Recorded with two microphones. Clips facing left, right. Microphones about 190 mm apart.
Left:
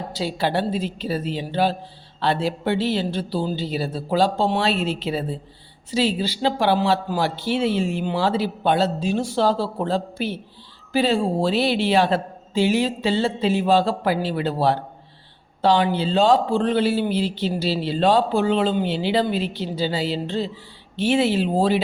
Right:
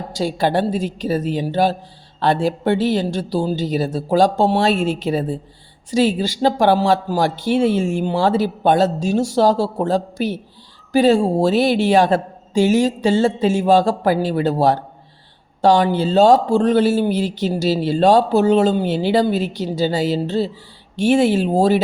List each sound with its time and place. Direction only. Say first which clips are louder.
0.1 s speech: right 5 dB; 50° right (ahead or behind)